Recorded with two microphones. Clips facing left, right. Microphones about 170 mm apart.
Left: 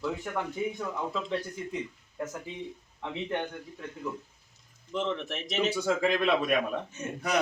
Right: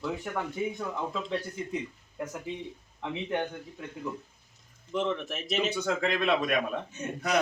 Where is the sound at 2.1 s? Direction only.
10° right (ahead or behind).